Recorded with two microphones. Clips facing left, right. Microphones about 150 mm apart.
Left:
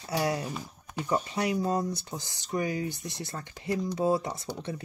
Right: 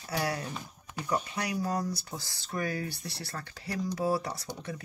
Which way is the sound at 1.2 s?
25° left (ahead or behind).